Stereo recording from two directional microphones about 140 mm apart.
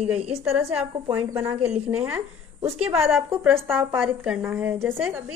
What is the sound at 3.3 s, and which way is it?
A woman's voice, 10° right (ahead or behind).